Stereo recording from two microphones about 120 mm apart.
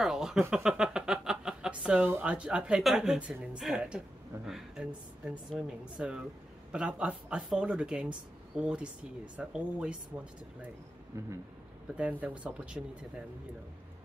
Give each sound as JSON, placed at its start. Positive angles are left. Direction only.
{"t": 0.0, "sound": "speech", "side_deg": -5}
{"t": 11.1, "sound": "speech", "side_deg": -25}
{"t": 11.9, "sound": "speech", "side_deg": -10}